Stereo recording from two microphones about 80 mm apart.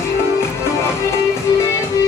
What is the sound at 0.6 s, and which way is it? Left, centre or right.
Music, left.